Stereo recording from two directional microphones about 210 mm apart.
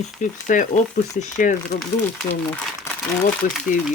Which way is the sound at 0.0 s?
35° left (ahead or behind).